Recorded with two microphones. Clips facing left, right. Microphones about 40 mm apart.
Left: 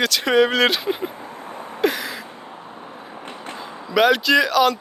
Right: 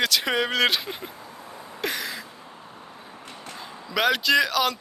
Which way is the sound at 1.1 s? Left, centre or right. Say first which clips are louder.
Left 7 dB; left.